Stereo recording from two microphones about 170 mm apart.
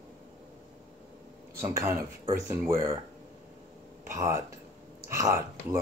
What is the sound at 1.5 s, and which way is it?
Speech, 15° right (ahead or behind).